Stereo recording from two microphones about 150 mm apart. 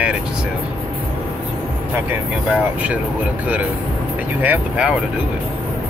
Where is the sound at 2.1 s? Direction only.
10° right (ahead or behind).